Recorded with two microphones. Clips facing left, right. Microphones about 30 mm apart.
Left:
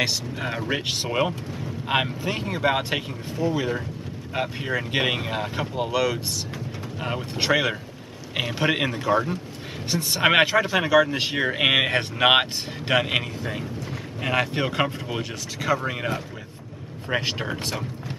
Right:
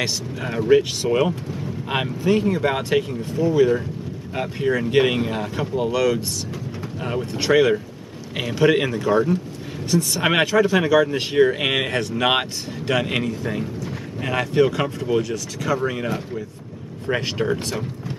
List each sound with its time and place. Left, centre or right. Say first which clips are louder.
0.0 s speech: even; centre
0.8 s speech: right 4 dB; left
1.2 s speech: right 3 dB; centre
7.5 s speech: right 9 dB; centre
9.8 s speech: right 1 dB; left